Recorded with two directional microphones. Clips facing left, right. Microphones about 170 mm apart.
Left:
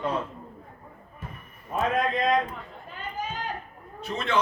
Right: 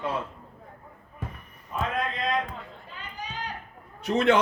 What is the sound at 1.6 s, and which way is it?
Speech, 45° left (ahead or behind).